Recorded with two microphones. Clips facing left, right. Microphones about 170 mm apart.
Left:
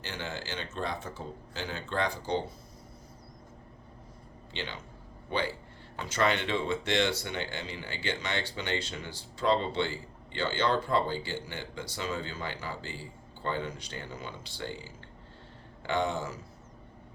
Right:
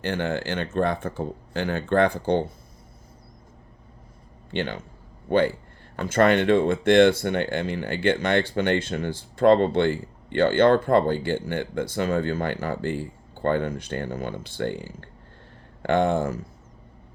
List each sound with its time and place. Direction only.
0.0 s speech: 55° right (ahead or behind)
4.5 s speech: 50° right (ahead or behind)